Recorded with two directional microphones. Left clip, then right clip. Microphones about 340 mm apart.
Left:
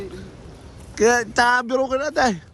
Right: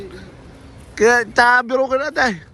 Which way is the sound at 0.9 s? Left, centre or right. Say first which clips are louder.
Right 4 dB; centre.